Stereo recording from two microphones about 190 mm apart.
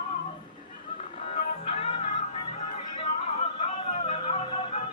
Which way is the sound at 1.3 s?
30° left (ahead or behind).